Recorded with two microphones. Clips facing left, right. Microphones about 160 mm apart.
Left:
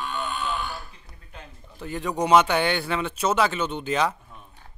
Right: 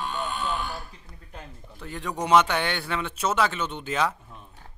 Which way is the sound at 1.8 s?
5° left (ahead or behind).